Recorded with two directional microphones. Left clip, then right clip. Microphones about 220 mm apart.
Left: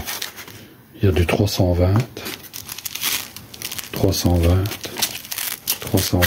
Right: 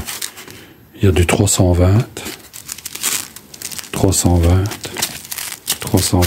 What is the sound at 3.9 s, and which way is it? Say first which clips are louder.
Speech: right 4 dB; 30° right (ahead or behind).